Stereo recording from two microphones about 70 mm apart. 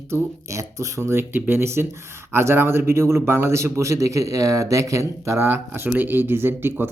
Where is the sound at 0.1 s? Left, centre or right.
Right.